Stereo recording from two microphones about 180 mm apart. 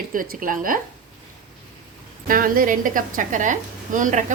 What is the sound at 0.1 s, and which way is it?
Speech, 50° right (ahead or behind).